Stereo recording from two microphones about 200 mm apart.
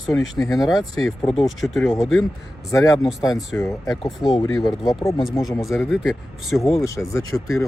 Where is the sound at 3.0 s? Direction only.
Centre (ahead or behind).